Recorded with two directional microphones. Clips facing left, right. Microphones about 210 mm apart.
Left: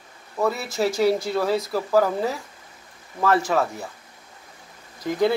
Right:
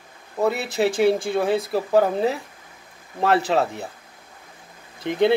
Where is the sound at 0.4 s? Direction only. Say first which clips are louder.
Right 2 dB; 30° right (ahead or behind).